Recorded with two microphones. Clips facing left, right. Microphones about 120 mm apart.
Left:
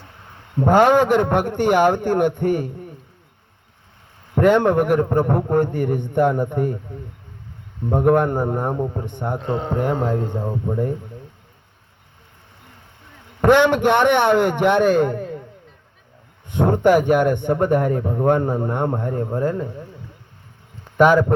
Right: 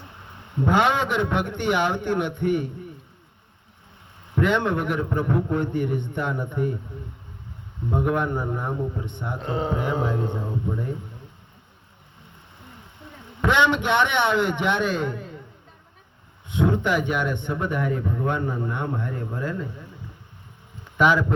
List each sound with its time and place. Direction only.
0.6 s a man's voice: 40° left (ahead or behind)
4.4 s a man's voice: 45° left (ahead or behind)
7.9 s a man's voice: 50° left (ahead or behind)
9.4 s speech: centre (ahead or behind)
9.8 s a man's voice: 50° left (ahead or behind)
13.4 s a man's voice: 50° left (ahead or behind)
16.5 s a man's voice: 45° left (ahead or behind)
21.0 s a man's voice: 45° left (ahead or behind)